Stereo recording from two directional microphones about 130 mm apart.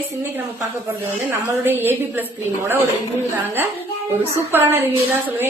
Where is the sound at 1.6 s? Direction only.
15° right (ahead or behind).